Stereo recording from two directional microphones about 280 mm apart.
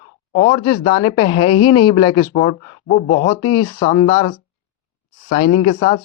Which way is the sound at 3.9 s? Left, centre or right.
Centre.